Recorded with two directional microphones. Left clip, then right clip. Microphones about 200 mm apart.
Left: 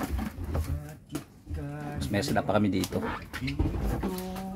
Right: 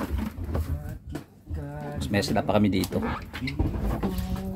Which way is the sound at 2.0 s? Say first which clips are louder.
Right 3 dB; centre (ahead or behind).